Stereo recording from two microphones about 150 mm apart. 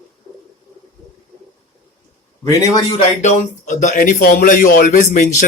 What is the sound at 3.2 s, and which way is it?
Speech, 55° left (ahead or behind).